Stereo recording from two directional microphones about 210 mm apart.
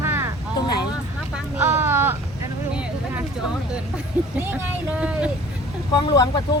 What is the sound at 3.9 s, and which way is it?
A woman's voice, 10° right (ahead or behind).